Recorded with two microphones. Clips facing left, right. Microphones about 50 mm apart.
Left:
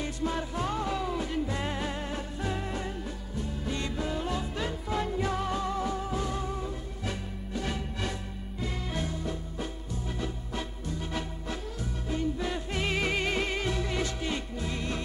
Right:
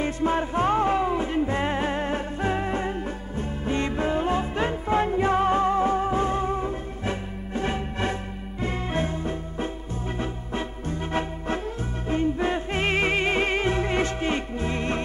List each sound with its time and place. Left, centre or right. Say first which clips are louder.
0.0 s music: right 8 dB; right